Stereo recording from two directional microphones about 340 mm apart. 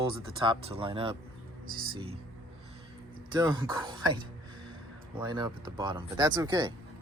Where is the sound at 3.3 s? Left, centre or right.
Centre.